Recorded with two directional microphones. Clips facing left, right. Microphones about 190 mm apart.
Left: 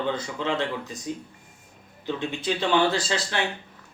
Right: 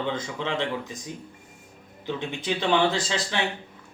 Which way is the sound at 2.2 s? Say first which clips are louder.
Left 1 dB; 15° right (ahead or behind).